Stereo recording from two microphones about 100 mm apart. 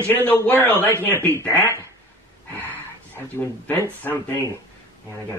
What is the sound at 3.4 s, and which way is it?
Speech, 20° left (ahead or behind).